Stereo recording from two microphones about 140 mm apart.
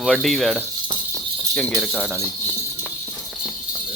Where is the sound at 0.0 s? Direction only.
5° left (ahead or behind).